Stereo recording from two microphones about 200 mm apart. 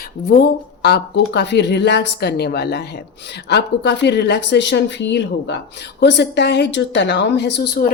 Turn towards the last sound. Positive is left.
turn(degrees=55)  # may be behind; listen again after turning